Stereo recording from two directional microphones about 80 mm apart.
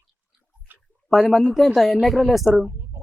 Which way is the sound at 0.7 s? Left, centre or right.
Right.